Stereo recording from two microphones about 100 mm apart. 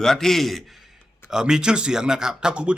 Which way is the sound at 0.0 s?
5° left (ahead or behind).